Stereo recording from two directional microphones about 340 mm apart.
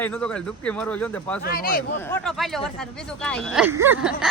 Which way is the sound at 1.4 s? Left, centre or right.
Left.